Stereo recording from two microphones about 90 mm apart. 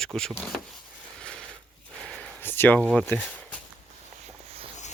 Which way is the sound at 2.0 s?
10° left (ahead or behind).